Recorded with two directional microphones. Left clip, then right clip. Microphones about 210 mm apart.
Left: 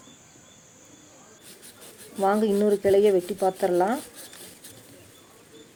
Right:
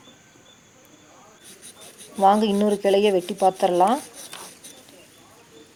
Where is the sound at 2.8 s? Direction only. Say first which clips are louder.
Right 1 dB; 15° right (ahead or behind).